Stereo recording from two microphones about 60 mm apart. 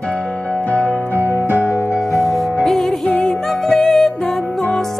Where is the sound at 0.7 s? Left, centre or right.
Left.